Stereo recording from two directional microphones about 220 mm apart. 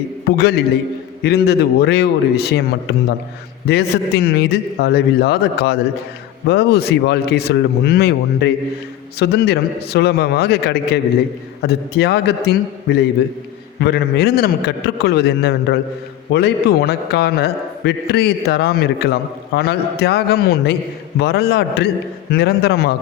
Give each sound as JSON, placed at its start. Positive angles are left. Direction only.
{"t": 0.3, "sound": "a man's voice", "side_deg": 45}
{"t": 3.7, "sound": "a man's voice", "side_deg": 45}